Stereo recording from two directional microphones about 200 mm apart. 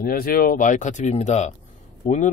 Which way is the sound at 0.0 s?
45° left (ahead or behind).